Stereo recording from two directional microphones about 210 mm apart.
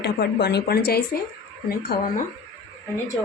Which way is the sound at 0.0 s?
50° left (ahead or behind).